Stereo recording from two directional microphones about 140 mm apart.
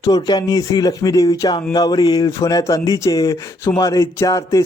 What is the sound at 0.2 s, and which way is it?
Speech, 30° left (ahead or behind).